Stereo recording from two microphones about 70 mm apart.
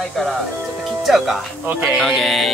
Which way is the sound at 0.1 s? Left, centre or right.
Centre.